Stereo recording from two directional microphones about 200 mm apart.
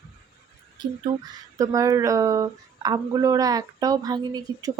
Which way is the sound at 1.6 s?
15° right (ahead or behind).